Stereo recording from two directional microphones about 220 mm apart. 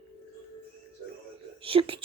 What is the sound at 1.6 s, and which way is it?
Speech, 25° right (ahead or behind).